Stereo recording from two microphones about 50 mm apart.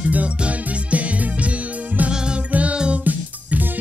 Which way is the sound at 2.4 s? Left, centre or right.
Right.